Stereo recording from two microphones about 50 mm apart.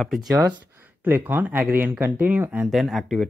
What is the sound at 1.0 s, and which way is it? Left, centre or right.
Speech, right.